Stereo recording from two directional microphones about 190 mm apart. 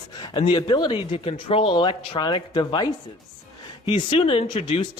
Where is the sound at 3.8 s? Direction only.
30° left (ahead or behind).